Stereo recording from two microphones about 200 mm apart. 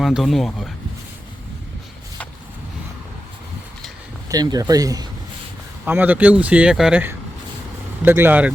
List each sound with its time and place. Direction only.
0.0 s speech: centre (ahead or behind)
4.3 s speech: 20° right (ahead or behind)